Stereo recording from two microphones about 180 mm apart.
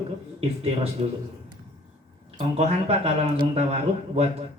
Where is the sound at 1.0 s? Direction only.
35° right (ahead or behind).